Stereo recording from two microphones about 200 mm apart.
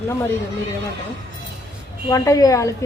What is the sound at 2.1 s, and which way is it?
Speech, 15° left (ahead or behind).